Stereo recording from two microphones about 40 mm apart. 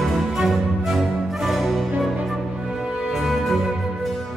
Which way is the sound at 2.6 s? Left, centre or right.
Centre.